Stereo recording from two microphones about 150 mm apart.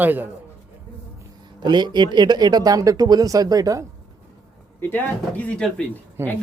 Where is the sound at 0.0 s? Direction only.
10° right (ahead or behind).